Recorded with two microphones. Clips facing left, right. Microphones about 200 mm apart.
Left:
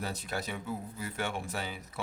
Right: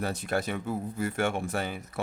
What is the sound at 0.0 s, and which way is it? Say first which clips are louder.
Speech: right 7 dB; 50° right (ahead or behind).